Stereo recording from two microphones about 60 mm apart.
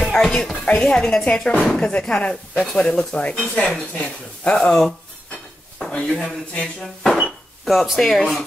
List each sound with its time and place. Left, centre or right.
0.0 s a sound: centre
0.7 s speech: centre
4.6 s speech: centre
6.0 s speech: centre
7.6 s speech: centre